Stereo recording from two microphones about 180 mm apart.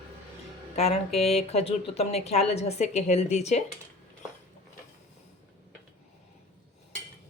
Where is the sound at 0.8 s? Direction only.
35° left (ahead or behind).